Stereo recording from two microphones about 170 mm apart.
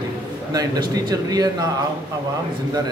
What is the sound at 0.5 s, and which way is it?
A man's voice, 20° right (ahead or behind).